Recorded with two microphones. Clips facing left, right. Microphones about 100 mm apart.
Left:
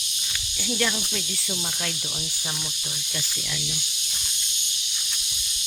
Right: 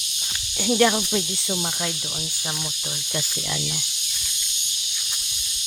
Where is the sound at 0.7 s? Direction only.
35° right (ahead or behind).